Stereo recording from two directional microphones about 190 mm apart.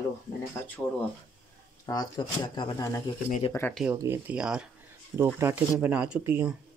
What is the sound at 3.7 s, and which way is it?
Speech, 5° right (ahead or behind).